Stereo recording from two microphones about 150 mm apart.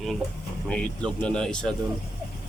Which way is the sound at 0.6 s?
5° left (ahead or behind).